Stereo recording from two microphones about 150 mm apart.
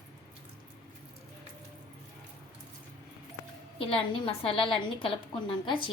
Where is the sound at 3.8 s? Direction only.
35° left (ahead or behind).